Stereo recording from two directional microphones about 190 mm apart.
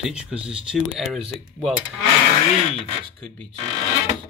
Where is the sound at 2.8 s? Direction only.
5° left (ahead or behind).